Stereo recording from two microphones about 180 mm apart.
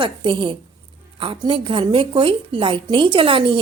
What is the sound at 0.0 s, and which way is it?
A woman's voice, 25° right (ahead or behind).